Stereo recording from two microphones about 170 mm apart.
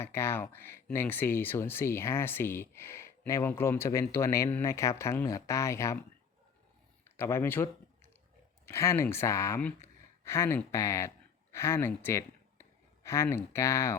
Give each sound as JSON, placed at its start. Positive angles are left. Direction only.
{"t": 0.0, "sound": "speech", "side_deg": 15}
{"t": 7.2, "sound": "speech", "side_deg": 15}